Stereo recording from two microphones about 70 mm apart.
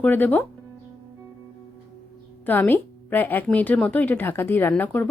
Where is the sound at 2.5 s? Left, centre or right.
Left.